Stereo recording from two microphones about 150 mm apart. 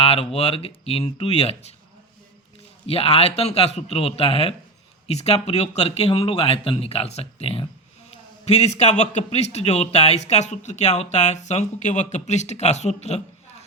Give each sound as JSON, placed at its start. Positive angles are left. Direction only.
{"t": 0.0, "sound": "a sound", "side_deg": 40}
{"t": 0.3, "sound": "speech", "side_deg": 40}
{"t": 2.8, "sound": "speech", "side_deg": 40}